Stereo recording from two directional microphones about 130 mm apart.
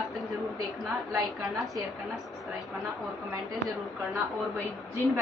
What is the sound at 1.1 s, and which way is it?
Speech, 25° right (ahead or behind).